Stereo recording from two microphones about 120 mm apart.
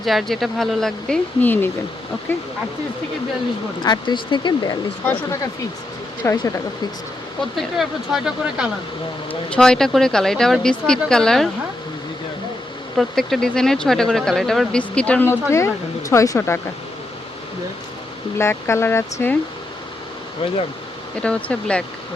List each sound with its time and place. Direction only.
0.0 s speech: centre (ahead or behind); by 2.4 s 20° left (ahead or behind)
3.8 s speech: 40° left (ahead or behind)
6.2 s speech: 20° left (ahead or behind)
7.5 s speech: centre (ahead or behind)
9.3 s speech: 10° left (ahead or behind)
13.0 s speech: centre (ahead or behind); by 16.6 s 25° left (ahead or behind)
18.3 s speech: 20° left (ahead or behind)
21.2 s speech: 10° left (ahead or behind)